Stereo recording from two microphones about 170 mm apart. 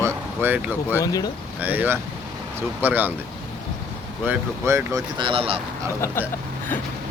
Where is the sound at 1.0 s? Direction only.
20° left (ahead or behind).